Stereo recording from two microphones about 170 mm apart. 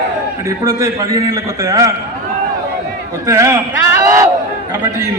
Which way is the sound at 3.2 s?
15° right (ahead or behind).